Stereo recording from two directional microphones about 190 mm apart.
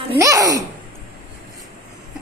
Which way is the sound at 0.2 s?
15° right (ahead or behind).